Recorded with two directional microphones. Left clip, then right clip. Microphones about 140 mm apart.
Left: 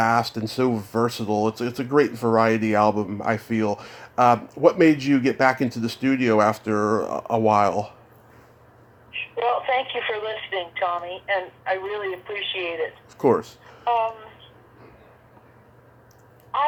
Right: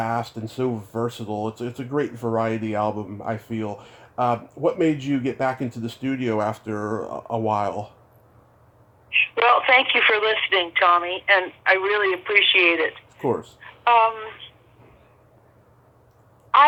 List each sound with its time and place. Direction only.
0.0 s speech: 20° left (ahead or behind)
9.0 s speech: 35° right (ahead or behind)
13.1 s speech: 20° left (ahead or behind)
13.8 s speech: 35° right (ahead or behind)
16.5 s speech: 40° right (ahead or behind)